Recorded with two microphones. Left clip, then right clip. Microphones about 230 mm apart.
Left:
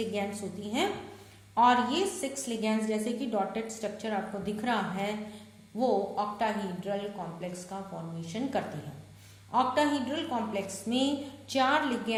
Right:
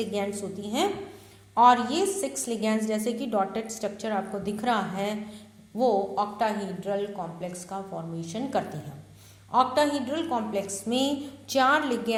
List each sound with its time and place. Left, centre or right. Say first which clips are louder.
0.0 s a woman's voice: right 3 dB; right